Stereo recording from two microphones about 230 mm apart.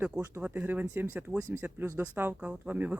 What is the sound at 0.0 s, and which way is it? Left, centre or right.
Speech, centre.